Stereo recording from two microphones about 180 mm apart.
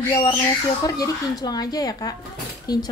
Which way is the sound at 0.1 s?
25° left (ahead or behind).